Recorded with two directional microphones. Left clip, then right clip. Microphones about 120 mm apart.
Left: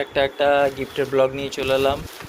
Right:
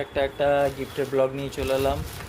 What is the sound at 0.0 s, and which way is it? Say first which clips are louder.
Speech: left 4 dB; 5° left (ahead or behind).